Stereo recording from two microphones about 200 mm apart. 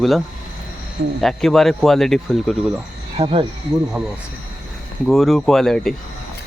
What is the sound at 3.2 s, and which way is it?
Speech, 25° right (ahead or behind).